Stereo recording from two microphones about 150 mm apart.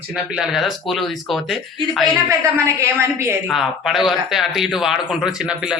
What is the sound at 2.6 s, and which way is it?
Speech, 20° right (ahead or behind).